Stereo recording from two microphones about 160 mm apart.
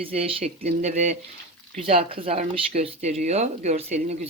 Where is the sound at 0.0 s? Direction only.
40° right (ahead or behind).